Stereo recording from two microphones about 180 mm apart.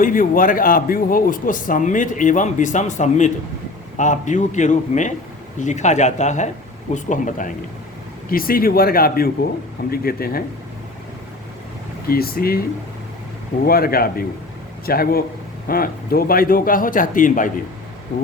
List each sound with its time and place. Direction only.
0.0 s speech: 50° left (ahead or behind)
12.0 s speech: 55° left (ahead or behind)
13.7 s speech: 55° left (ahead or behind)